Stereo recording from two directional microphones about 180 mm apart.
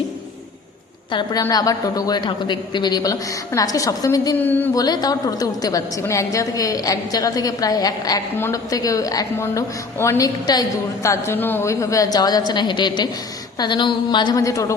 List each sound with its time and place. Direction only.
1.1 s a woman's voice: 20° left (ahead or behind)